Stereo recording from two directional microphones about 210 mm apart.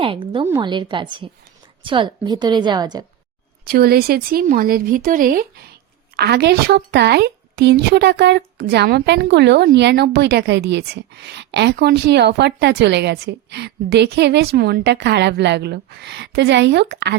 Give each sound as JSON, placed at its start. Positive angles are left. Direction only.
{"t": 0.0, "sound": "a woman's voice", "side_deg": -25}
{"t": 3.7, "sound": "a woman's voice", "side_deg": -45}